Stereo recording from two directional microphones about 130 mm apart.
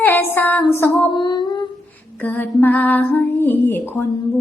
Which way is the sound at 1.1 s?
35° left (ahead or behind).